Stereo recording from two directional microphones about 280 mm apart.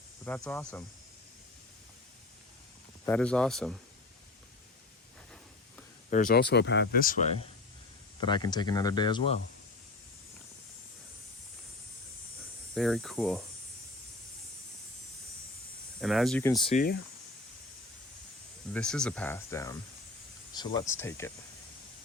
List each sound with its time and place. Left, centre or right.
0.3 s speech: centre
3.1 s speech: centre
6.1 s speech: left
8.3 s speech: centre
12.7 s speech: centre
16.0 s speech: centre
18.7 s speech: centre